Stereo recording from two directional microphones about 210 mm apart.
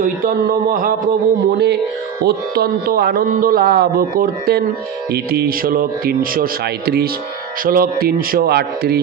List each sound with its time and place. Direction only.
0.0 s a man's voice: 45° right (ahead or behind)